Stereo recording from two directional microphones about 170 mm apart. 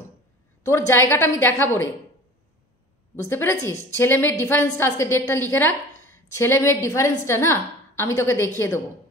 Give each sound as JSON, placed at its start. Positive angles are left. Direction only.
{"t": 0.7, "sound": "a woman's voice", "side_deg": 15}
{"t": 3.2, "sound": "a woman's voice", "side_deg": 15}